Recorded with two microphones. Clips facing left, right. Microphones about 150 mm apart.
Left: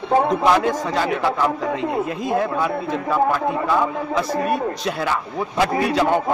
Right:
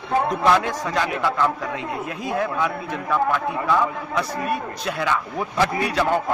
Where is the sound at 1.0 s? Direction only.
15° left (ahead or behind).